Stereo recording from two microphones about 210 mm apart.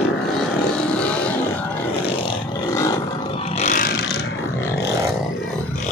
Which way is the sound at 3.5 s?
35° left (ahead or behind).